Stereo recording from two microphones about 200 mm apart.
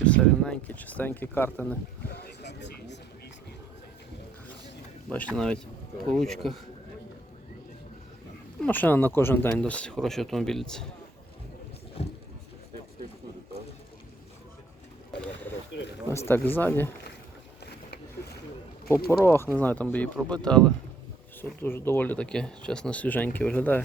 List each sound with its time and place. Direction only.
0.0 s speech: 5° left (ahead or behind)
2.2 s a sound: 60° left (ahead or behind)
5.0 s speech: 5° left (ahead or behind)
8.6 s speech: 10° left (ahead or behind)
12.0 s a sound: 30° left (ahead or behind)
16.0 s speech: 15° left (ahead or behind)
19.2 s speech: 10° left (ahead or behind)